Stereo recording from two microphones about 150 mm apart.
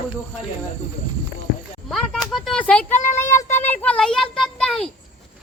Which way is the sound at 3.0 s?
55° left (ahead or behind).